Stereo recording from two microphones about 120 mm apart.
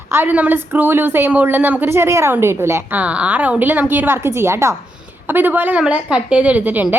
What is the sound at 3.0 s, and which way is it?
A woman's voice, 10° right (ahead or behind).